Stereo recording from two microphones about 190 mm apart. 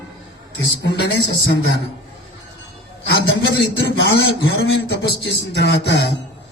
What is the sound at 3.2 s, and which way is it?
A man's voice, 65° left (ahead or behind).